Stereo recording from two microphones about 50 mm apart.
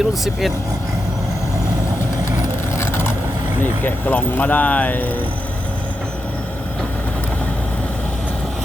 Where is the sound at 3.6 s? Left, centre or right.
Left.